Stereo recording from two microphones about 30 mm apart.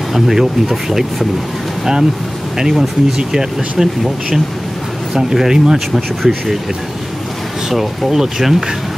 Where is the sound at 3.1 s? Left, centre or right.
Centre.